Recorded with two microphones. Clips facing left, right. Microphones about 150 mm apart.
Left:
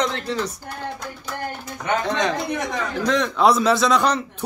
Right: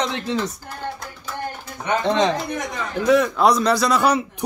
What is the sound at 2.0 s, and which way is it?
Speech, 20° right (ahead or behind).